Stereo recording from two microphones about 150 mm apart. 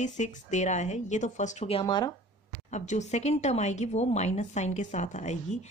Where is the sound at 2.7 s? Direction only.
50° left (ahead or behind).